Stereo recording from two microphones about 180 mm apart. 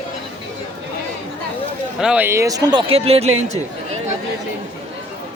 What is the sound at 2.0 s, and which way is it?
Speech, 5° right (ahead or behind).